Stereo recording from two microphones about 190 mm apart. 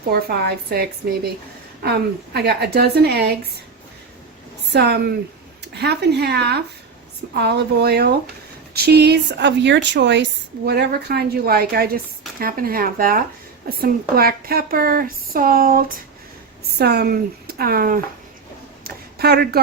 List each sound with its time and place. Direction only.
0.1 s speech: 55° right (ahead or behind)
2.3 s speech: 60° right (ahead or behind)
4.7 s speech: 60° right (ahead or behind)
18.9 s a sound: 55° right (ahead or behind)